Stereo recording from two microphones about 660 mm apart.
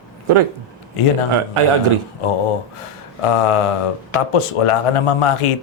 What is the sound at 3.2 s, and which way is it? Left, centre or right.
Speech, left.